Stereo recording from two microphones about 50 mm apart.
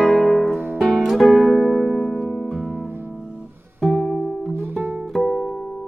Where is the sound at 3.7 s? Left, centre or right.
Centre.